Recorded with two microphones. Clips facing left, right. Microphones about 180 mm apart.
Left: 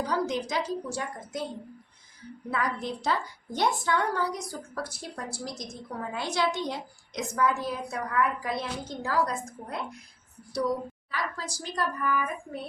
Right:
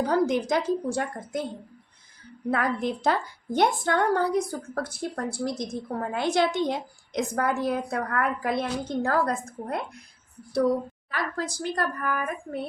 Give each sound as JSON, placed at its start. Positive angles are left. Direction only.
{"t": 0.0, "sound": "a woman's voice", "side_deg": -55}
{"t": 2.5, "sound": "a woman's voice", "side_deg": -55}